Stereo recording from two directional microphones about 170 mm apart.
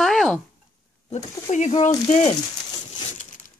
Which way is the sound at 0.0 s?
Centre (ahead or behind).